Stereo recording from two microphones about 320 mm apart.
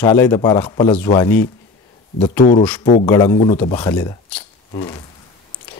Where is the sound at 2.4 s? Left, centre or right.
Left.